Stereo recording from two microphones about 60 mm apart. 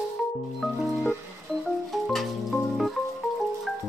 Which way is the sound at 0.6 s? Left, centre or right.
Centre.